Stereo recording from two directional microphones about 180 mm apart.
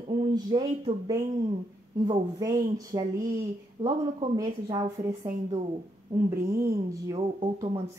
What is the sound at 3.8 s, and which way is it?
Speech, 40° right (ahead or behind).